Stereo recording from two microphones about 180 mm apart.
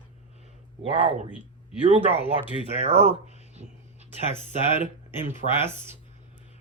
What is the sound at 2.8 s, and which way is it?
Speech, 35° right (ahead or behind).